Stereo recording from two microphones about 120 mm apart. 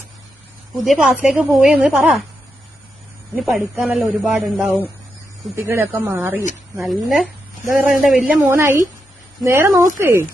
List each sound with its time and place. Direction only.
0.9 s a man's voice: 5° right (ahead or behind)
3.3 s a man's voice: 5° right (ahead or behind)
5.5 s speech: 20° right (ahead or behind)
6.7 s a man's voice: centre (ahead or behind)
8.4 s speech: 20° right (ahead or behind)